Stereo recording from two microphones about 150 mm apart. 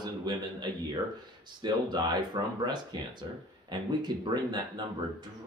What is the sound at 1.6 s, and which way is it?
A man's voice, 30° right (ahead or behind).